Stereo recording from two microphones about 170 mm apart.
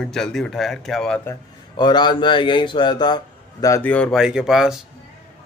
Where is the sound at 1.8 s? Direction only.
25° left (ahead or behind).